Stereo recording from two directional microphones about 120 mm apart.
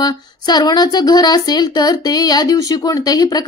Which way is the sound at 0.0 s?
35° left (ahead or behind).